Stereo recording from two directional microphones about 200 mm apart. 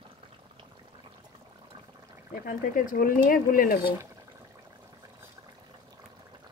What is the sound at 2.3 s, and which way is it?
Speech, 45° left (ahead or behind).